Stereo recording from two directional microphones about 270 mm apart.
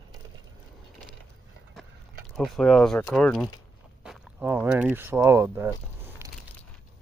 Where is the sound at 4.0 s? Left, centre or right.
Centre.